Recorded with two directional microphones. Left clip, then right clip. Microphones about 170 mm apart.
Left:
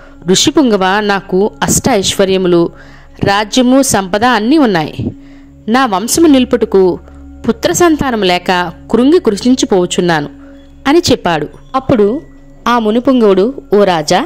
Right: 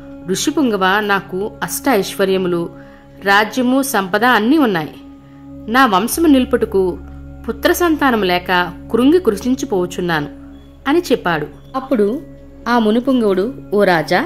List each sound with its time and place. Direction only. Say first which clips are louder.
0.3 s a woman's voice: left 8 dB; 35° left (ahead or behind)